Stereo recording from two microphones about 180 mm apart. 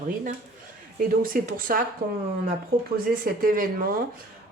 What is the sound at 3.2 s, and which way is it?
Speech, 50° right (ahead or behind).